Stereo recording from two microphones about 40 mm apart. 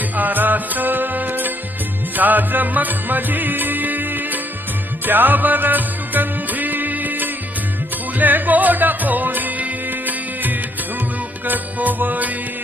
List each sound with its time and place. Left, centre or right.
0.2 s music: right